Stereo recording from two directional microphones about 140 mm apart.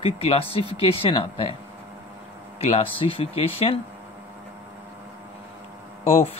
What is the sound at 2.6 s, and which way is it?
Speech, 45° left (ahead or behind).